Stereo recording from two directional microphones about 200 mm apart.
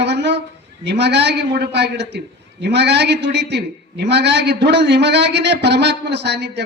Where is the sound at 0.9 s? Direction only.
55° right (ahead or behind).